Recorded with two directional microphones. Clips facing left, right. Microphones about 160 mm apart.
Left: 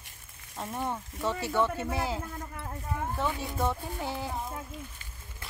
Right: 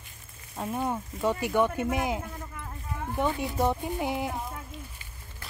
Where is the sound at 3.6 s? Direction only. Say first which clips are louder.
Right 4 dB; 15° right (ahead or behind).